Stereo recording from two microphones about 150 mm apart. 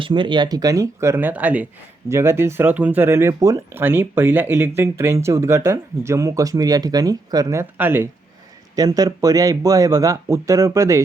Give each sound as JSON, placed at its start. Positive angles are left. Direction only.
{"t": 0.0, "sound": "speech", "side_deg": -30}
{"t": 8.7, "sound": "speech", "side_deg": -25}